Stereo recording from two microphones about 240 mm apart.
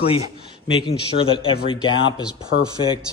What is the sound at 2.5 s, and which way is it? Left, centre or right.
Speech, left.